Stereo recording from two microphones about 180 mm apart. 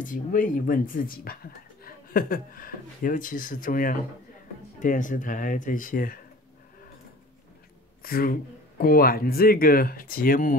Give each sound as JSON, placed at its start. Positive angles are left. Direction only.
{"t": 0.0, "sound": "speech", "side_deg": 50}
{"t": 8.0, "sound": "speech", "side_deg": 55}